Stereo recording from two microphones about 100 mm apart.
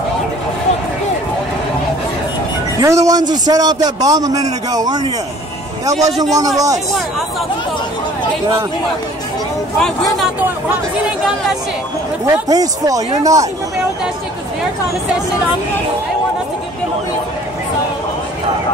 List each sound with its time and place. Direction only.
2.8 s a man's voice: 35° right (ahead or behind)
6.3 s a man's voice: 35° right (ahead or behind)
9.8 s speech: 5° left (ahead or behind)
12.3 s a man's voice: 35° right (ahead or behind)